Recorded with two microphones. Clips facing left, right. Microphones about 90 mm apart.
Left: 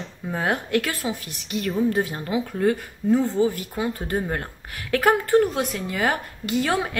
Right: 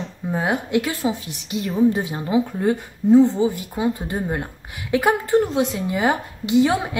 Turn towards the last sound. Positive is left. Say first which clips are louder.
# right 5 dB
turn(degrees=-20)  # may be behind; listen again after turning